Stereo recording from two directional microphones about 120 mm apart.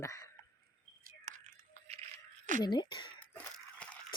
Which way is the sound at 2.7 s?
35° left (ahead or behind).